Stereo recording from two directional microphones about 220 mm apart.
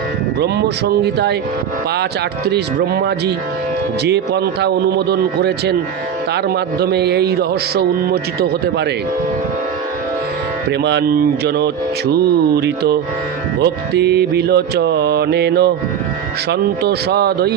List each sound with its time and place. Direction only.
0.3 s a man's voice: 50° right (ahead or behind)
2.5 s a man's voice: 45° right (ahead or behind)
10.7 s a man's voice: 50° right (ahead or behind)